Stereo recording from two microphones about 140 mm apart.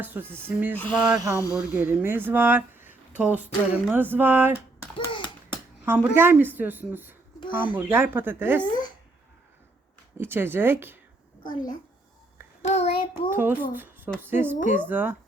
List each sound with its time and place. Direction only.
0.0 s speech: 15° right (ahead or behind)
1.1 s speech: 25° right (ahead or behind)
1.5 s speech: 10° right (ahead or behind)
4.9 s a sound: 35° left (ahead or behind)
5.8 s speech: 15° right (ahead or behind)
10.2 s speech: 15° right (ahead or behind)
12.6 s child singing: 50° left (ahead or behind)
13.3 s speech: 15° right (ahead or behind)